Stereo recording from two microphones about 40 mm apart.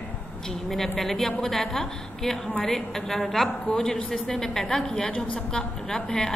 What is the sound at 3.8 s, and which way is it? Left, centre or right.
A woman's voice, left.